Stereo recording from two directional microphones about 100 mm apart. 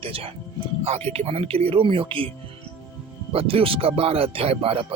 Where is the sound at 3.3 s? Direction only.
70° right (ahead or behind).